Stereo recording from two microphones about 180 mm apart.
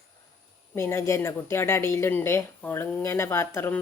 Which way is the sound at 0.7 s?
15° left (ahead or behind).